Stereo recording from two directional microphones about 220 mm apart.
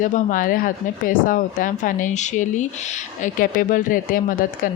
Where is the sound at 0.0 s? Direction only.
35° left (ahead or behind).